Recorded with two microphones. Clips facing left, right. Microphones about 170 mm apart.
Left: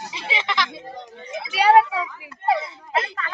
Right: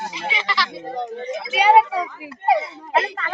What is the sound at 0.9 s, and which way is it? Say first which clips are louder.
Speech: right 7 dB; 55° right (ahead or behind).